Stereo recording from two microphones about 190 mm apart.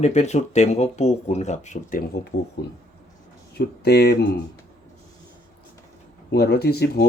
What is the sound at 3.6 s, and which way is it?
Speech, 60° left (ahead or behind).